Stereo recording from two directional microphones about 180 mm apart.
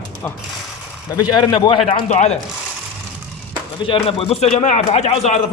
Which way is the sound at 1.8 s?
35° left (ahead or behind).